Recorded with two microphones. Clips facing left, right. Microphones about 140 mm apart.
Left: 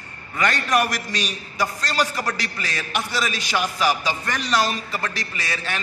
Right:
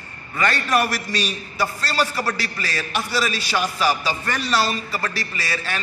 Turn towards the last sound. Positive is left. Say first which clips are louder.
# right 1 dB
turn(degrees=20)  # may be behind; listen again after turning